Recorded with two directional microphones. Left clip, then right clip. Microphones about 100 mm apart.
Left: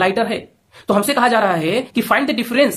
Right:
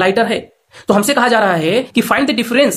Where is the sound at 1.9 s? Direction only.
30° right (ahead or behind).